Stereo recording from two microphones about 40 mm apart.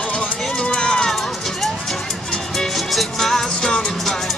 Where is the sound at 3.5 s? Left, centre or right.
Centre.